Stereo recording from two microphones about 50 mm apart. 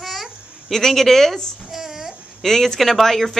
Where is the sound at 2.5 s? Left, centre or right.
Centre.